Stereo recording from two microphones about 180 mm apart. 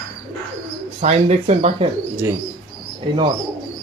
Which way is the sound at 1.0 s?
35° right (ahead or behind).